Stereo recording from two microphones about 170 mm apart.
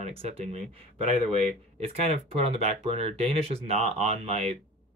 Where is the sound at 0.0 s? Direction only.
35° right (ahead or behind).